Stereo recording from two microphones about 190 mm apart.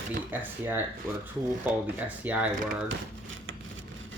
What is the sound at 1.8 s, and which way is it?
Speech, 10° right (ahead or behind).